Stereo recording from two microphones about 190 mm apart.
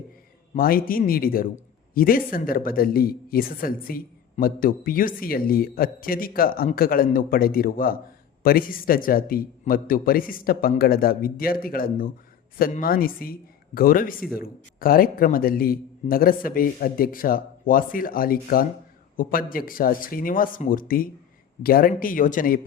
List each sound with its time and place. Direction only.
0.5 s speech: 50° left (ahead or behind)